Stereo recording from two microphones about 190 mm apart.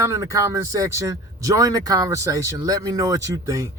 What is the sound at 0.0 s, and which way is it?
Speech, 15° right (ahead or behind).